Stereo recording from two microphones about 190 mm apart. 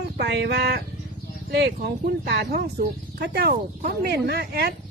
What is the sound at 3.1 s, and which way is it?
Speech, 55° right (ahead or behind).